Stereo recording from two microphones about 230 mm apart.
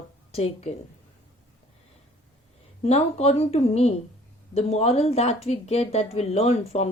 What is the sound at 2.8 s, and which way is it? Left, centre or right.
Speech, left.